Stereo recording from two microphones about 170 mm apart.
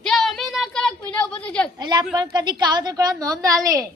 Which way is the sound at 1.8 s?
25° right (ahead or behind).